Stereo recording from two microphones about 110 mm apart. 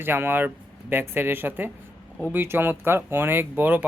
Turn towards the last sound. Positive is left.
turn(degrees=-15)  # may be behind; listen again after turning